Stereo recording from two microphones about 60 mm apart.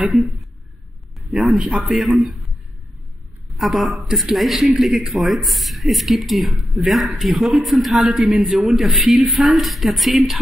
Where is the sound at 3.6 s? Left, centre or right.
Centre.